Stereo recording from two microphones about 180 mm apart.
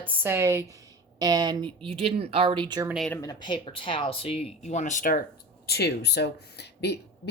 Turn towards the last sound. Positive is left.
turn(degrees=65)  # may be behind; listen again after turning